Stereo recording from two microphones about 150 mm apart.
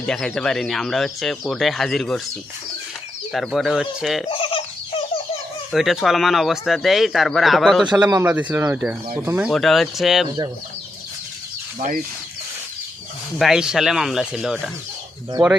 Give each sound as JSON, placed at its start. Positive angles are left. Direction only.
{"t": 0.0, "sound": "speech", "side_deg": 5}
{"t": 3.3, "sound": "speech", "side_deg": 0}
{"t": 4.3, "sound": "fowl", "side_deg": 35}
{"t": 5.7, "sound": "speech", "side_deg": 0}
{"t": 8.1, "sound": "speech", "side_deg": -10}
{"t": 9.5, "sound": "speech", "side_deg": 0}
{"t": 10.2, "sound": "speech", "side_deg": -30}
{"t": 13.4, "sound": "speech", "side_deg": -5}